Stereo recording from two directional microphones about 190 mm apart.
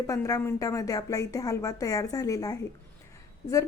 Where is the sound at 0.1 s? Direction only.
15° left (ahead or behind).